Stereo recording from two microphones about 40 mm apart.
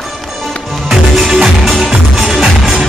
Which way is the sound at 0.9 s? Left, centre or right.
Centre.